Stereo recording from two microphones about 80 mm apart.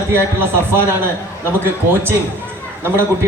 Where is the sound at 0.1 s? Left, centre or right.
Right.